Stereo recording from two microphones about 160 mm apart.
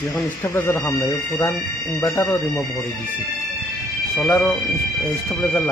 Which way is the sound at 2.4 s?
Centre (ahead or behind).